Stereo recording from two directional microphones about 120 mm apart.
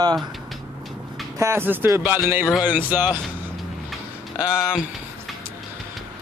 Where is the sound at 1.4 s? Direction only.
20° right (ahead or behind).